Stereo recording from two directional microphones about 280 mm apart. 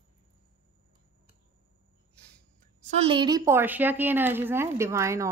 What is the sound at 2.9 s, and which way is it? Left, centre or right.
Speech, centre.